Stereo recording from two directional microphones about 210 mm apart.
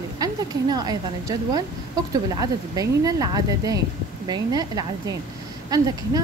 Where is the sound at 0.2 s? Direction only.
20° right (ahead or behind).